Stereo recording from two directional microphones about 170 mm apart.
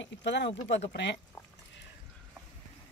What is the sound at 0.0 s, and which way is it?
Speech, 90° left.